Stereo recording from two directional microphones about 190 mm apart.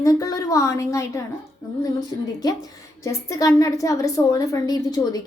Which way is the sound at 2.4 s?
20° left (ahead or behind).